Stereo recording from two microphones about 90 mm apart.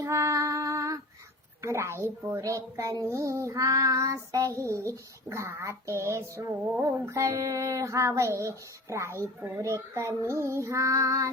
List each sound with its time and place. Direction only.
0.0 s female singing: 35° right (ahead or behind)
1.6 s child singing: 30° right (ahead or behind)